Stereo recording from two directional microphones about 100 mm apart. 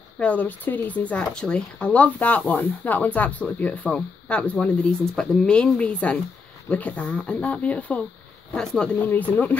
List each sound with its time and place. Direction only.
0.2 s speech: 15° left (ahead or behind)
9.0 s speech: 20° left (ahead or behind)